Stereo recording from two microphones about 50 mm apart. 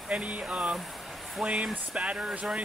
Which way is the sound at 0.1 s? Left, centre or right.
Right.